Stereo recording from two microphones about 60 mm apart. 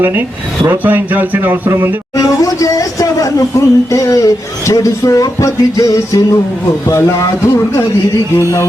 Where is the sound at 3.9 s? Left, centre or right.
Left.